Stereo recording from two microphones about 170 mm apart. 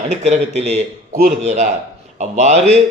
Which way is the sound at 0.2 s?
40° right (ahead or behind).